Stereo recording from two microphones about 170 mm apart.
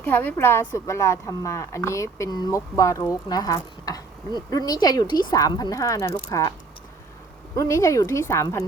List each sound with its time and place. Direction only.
0.0 s a woman's voice: 10° left (ahead or behind)
7.5 s a woman's voice: 20° left (ahead or behind)